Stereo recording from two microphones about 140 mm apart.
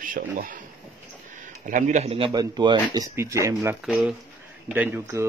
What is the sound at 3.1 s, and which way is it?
Speech, 20° right (ahead or behind).